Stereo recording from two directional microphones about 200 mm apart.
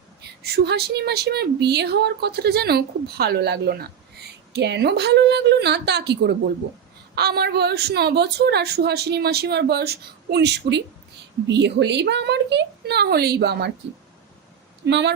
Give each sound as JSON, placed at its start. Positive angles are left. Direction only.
{"t": 0.4, "sound": "a woman's voice", "side_deg": -55}
{"t": 14.8, "sound": "speech", "side_deg": -60}